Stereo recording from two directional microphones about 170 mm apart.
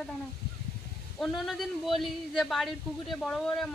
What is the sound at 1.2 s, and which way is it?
Speech, centre (ahead or behind).